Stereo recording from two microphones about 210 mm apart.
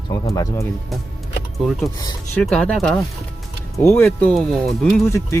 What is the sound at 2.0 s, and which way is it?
Speech, 20° left (ahead or behind).